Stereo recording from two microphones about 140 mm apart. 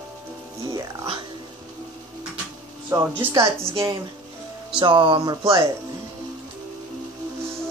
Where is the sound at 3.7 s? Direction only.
40° right (ahead or behind).